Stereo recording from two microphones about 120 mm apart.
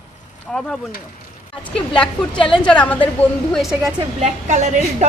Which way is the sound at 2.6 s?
10° left (ahead or behind).